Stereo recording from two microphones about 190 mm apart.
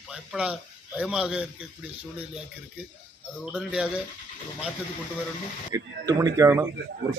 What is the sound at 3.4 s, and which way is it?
Speech, 5° right (ahead or behind).